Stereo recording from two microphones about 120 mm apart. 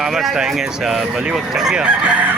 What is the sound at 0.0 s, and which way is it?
Speech, centre (ahead or behind).